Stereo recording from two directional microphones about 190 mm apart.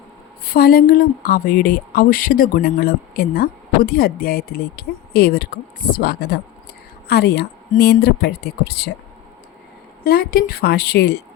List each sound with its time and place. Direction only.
0.4 s speech: 50° left (ahead or behind)
10.0 s speech: 50° left (ahead or behind)